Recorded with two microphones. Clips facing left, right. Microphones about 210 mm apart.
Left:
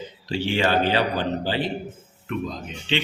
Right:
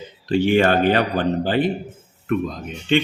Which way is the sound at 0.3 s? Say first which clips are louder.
Right 7 dB; 50° right (ahead or behind).